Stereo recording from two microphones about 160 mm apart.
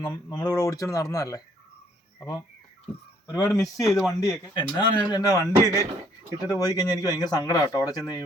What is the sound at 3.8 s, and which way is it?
Speech, 20° left (ahead or behind).